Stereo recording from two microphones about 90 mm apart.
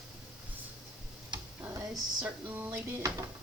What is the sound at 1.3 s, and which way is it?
Tick-tock, 60° right (ahead or behind).